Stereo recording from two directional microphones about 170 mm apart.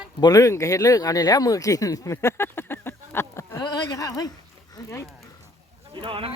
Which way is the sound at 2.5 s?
15° left (ahead or behind).